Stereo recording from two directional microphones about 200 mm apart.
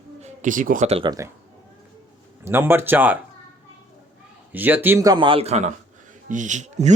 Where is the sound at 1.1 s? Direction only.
15° right (ahead or behind).